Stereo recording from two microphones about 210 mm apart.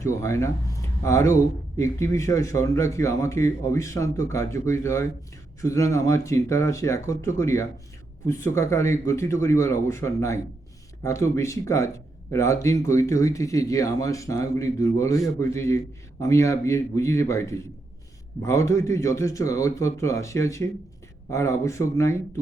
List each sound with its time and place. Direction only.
0.0 s a man's voice: 15° left (ahead or behind)